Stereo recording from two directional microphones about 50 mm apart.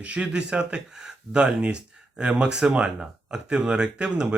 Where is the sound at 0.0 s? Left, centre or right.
Right.